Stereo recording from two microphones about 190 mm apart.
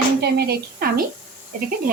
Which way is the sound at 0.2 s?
60° right (ahead or behind).